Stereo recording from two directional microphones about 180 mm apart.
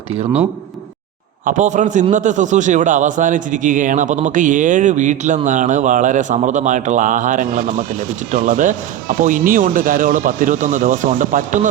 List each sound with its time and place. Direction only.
1.5 s a man's voice: 45° right (ahead or behind)